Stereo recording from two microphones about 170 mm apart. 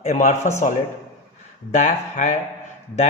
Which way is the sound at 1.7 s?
45° left (ahead or behind).